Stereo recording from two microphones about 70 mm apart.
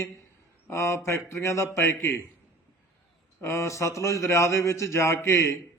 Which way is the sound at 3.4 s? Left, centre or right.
Left.